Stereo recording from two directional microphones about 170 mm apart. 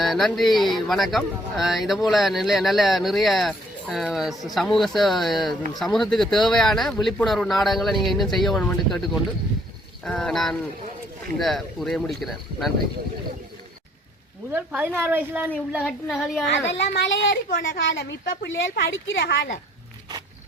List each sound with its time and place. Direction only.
0.0 s speech: centre (ahead or behind)
14.5 s a woman's voice: 10° right (ahead or behind)
15.8 s speech: 5° left (ahead or behind)
16.6 s a woman's voice: 90° left